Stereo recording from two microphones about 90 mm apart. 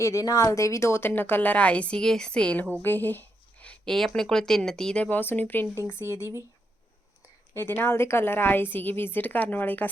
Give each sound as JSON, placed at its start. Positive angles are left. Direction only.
{"t": 0.0, "sound": "a woman's voice", "side_deg": 35}
{"t": 6.0, "sound": "speech", "side_deg": -30}
{"t": 7.5, "sound": "a woman's voice", "side_deg": 25}